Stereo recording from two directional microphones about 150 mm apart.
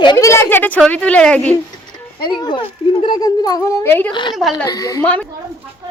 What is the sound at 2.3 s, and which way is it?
Speech, 30° left (ahead or behind).